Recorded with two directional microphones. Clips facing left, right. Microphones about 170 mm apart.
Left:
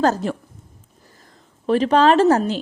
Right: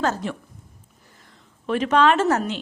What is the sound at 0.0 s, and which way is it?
A woman's voice, 40° left (ahead or behind).